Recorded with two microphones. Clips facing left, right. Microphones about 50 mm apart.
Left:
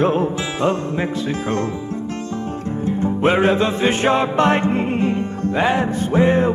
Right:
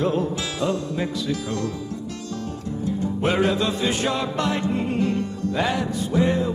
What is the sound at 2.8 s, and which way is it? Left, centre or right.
Music, left.